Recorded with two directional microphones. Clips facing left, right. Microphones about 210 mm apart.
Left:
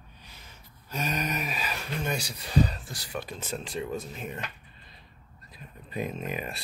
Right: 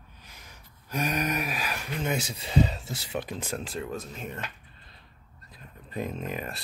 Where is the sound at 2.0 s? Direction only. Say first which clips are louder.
Right 2 dB; 20° right (ahead or behind).